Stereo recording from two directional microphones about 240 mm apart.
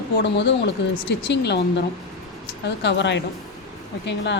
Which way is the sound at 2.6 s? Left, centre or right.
Left.